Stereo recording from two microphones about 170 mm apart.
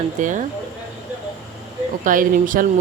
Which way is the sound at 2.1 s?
50° right (ahead or behind).